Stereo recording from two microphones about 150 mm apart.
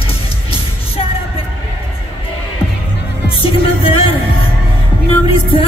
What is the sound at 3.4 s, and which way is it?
Music, 40° left (ahead or behind).